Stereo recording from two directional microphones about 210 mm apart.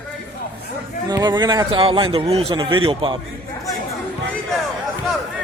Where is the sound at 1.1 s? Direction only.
20° right (ahead or behind).